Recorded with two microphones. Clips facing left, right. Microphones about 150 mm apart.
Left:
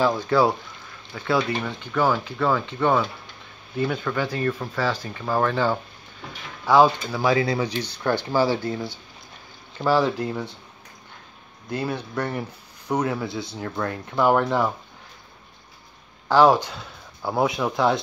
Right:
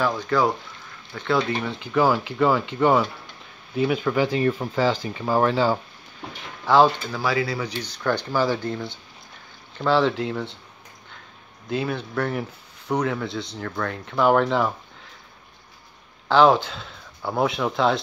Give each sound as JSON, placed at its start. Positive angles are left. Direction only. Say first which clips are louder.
{"t": 0.0, "sound": "speech", "louder": "left 2 dB", "side_deg": 10}
{"t": 6.6, "sound": "speech", "louder": "even", "side_deg": 5}
{"t": 7.3, "sound": "speech", "louder": "left 3 dB", "side_deg": 25}
{"t": 8.3, "sound": "speech", "louder": "left 1 dB", "side_deg": 15}
{"t": 11.7, "sound": "speech", "louder": "right 1 dB", "side_deg": 0}
{"t": 13.6, "sound": "speech", "louder": "left 1 dB", "side_deg": 15}
{"t": 13.8, "sound": "speech", "louder": "right 1 dB", "side_deg": 5}
{"t": 16.3, "sound": "speech", "louder": "even", "side_deg": 0}